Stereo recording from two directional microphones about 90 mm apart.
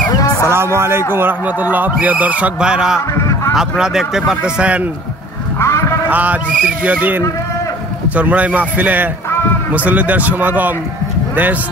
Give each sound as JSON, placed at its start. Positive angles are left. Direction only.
{"t": 0.1, "sound": "music", "side_deg": 40}
{"t": 0.5, "sound": "a man's voice", "side_deg": -30}
{"t": 3.2, "sound": "a sound", "side_deg": 35}
{"t": 3.5, "sound": "a man's voice", "side_deg": -5}
{"t": 5.6, "sound": "a sound", "side_deg": 30}
{"t": 6.0, "sound": "a man's voice", "side_deg": -15}